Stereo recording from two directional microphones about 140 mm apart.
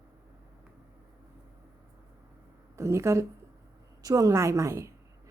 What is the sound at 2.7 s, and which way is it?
A woman's voice, 20° right (ahead or behind).